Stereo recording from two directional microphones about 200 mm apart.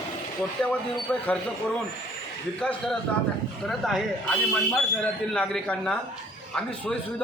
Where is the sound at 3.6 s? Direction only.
Centre (ahead or behind).